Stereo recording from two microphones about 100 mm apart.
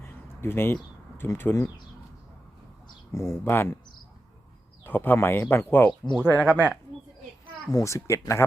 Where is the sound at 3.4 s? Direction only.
20° left (ahead or behind).